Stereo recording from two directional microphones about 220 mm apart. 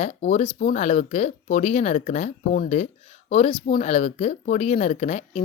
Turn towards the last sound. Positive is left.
turn(degrees=30)  # may be behind; listen again after turning